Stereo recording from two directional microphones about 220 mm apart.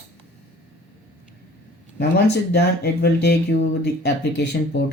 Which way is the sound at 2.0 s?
50° left (ahead or behind).